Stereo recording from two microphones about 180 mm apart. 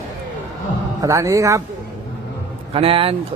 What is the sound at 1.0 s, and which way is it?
Speech, 15° right (ahead or behind).